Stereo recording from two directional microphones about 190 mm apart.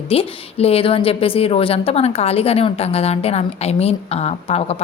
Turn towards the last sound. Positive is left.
turn(degrees=35)  # may be behind; listen again after turning